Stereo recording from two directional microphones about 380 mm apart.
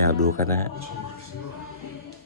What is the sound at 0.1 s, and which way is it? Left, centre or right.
Speech, right.